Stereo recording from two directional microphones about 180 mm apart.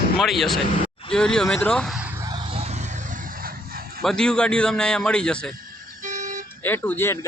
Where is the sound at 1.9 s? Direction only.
10° right (ahead or behind).